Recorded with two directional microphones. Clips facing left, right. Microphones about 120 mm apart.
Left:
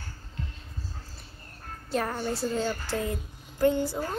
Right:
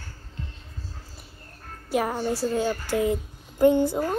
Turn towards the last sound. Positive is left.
turn(degrees=-20)  # may be behind; listen again after turning